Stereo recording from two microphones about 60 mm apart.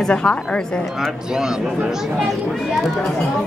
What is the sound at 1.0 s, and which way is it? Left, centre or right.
Speech, centre.